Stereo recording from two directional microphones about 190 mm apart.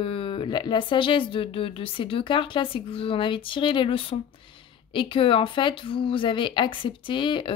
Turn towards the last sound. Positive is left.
turn(degrees=25)  # may be behind; listen again after turning